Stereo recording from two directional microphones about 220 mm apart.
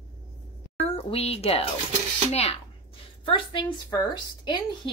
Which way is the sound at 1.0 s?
25° left (ahead or behind).